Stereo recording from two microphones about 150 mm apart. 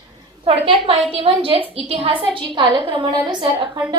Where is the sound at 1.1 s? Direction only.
40° right (ahead or behind).